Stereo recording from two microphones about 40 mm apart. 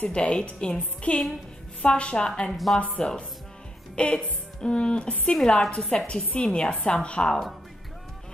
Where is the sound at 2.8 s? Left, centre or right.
Left.